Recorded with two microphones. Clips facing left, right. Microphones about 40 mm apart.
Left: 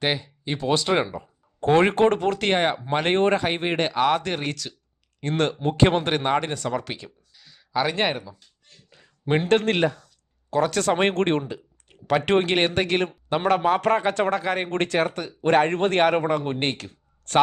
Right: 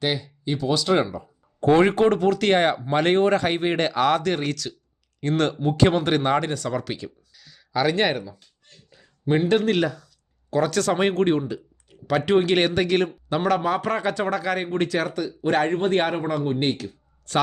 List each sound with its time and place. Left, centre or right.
0.0 s speech: left
0.9 s speech: centre
1.6 s speech: left
2.5 s speech: centre
5.6 s speech: left
6.1 s speech: centre
8.9 s a sound: left
9.4 s speech: left
11.1 s a man's voice: left
11.9 s a sound: left
12.2 s a man's voice: left
12.7 s speech: left
14.7 s a man's voice: left